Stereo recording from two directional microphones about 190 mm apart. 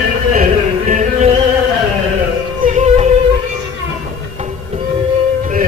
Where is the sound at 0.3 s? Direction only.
40° right (ahead or behind).